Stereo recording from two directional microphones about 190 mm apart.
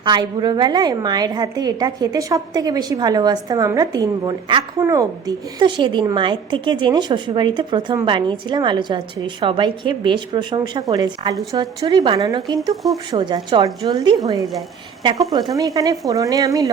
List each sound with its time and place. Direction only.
0.0 s a woman's voice: 25° right (ahead or behind)